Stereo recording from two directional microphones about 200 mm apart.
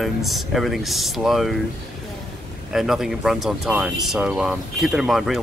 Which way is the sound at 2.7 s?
Centre (ahead or behind).